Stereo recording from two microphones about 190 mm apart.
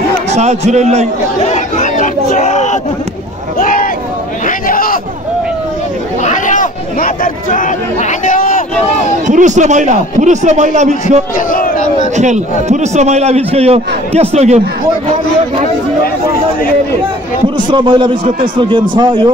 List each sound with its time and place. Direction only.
0.3 s a man's voice: 35° right (ahead or behind)
1.4 s chatter: 40° left (ahead or behind)
2.3 s a sound: 40° left (ahead or behind)
6.2 s a sound: 40° left (ahead or behind)
9.3 s a man's voice: 40° right (ahead or behind)
11.3 s crowd: 45° left (ahead or behind)
12.2 s a man's voice: 40° right (ahead or behind)
17.6 s a man's voice: 25° right (ahead or behind)